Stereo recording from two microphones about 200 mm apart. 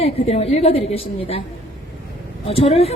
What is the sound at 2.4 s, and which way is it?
Speech, 30° left (ahead or behind).